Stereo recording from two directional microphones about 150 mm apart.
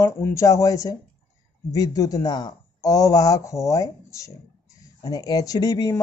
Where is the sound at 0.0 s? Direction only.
20° left (ahead or behind).